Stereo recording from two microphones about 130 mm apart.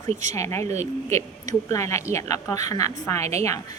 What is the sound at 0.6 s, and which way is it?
Speech, 55° right (ahead or behind).